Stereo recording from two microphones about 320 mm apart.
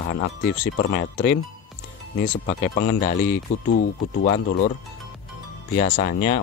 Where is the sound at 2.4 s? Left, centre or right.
Left.